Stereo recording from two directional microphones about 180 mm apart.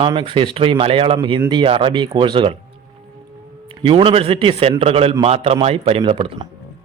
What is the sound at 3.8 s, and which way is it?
Speech, 30° right (ahead or behind).